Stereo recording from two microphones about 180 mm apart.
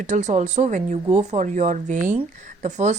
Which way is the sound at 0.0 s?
40° right (ahead or behind).